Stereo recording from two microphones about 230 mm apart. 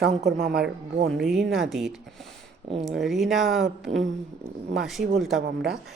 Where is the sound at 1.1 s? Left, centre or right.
Centre.